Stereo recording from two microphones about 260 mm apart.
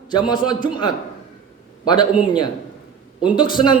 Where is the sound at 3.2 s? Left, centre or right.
Centre.